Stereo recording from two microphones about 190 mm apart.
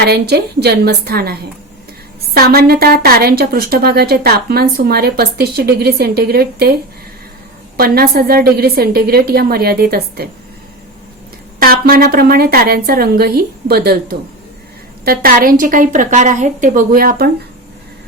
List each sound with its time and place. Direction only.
0.0 s a woman's voice: 60° right (ahead or behind)
7.8 s a woman's voice: 50° right (ahead or behind)
11.6 s a woman's voice: 50° right (ahead or behind)